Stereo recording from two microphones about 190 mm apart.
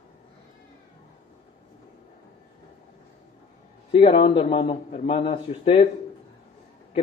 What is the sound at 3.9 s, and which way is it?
A man's voice, 30° left (ahead or behind).